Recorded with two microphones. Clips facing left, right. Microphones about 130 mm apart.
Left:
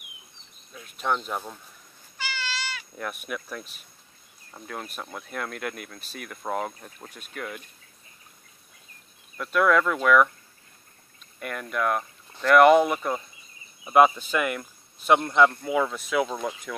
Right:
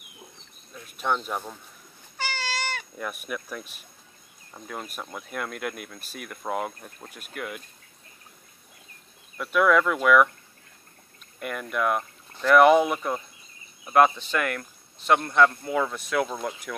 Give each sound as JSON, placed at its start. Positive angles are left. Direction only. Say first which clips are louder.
{"t": 0.8, "sound": "speech", "louder": "even", "side_deg": 0}
{"t": 2.1, "sound": "cat", "louder": "right 3 dB", "side_deg": -40}
{"t": 3.0, "sound": "speech", "louder": "left 3 dB", "side_deg": 0}
{"t": 9.4, "sound": "speech", "louder": "right 1 dB", "side_deg": -5}
{"t": 11.3, "sound": "speech", "louder": "right 1 dB", "side_deg": 0}